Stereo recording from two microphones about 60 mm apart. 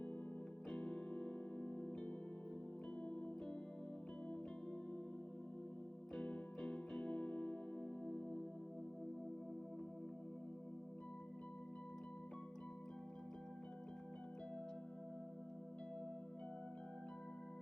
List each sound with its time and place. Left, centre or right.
0.7 s music: centre
6.1 s music: centre